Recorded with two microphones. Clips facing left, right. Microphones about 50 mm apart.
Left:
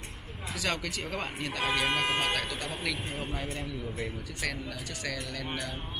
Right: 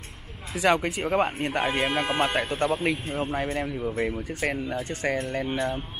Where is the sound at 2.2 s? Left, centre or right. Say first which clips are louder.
Right 7 dB; right.